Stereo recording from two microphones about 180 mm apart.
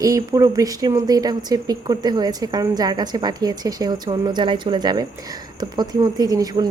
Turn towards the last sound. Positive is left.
turn(degrees=-20)  # may be behind; listen again after turning